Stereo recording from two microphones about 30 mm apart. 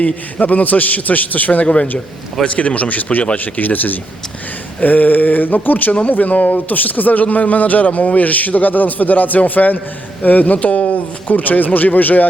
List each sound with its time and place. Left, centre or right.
0.0 s speech: left
1.6 s a man's voice: left
2.5 s speech: left